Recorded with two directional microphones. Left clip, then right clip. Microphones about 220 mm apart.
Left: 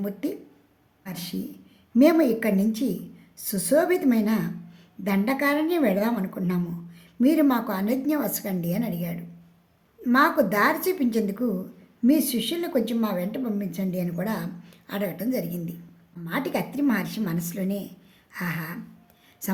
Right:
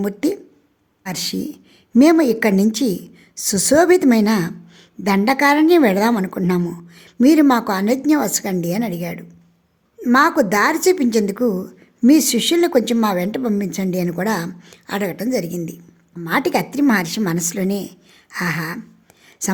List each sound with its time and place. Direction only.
0.0 s a woman's voice: 45° right (ahead or behind)